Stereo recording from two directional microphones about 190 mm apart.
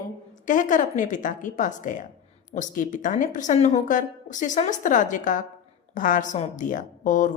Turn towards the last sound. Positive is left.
turn(degrees=40)  # may be behind; listen again after turning